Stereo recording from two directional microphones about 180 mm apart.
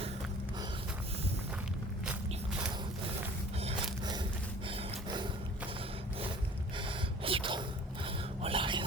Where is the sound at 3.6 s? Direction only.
25° right (ahead or behind).